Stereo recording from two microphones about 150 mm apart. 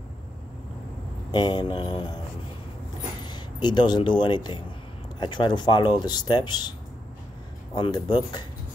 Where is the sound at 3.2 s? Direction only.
30° left (ahead or behind).